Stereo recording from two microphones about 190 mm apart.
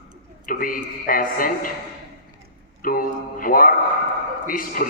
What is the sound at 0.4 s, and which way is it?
A man's voice, 45° left (ahead or behind).